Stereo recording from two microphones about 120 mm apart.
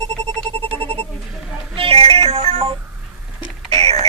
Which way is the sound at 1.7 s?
50° right (ahead or behind).